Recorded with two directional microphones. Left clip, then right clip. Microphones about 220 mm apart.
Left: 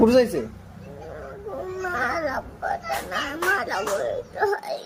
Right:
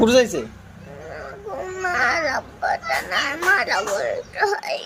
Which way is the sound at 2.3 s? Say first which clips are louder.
Right 5 dB; centre (ahead or behind).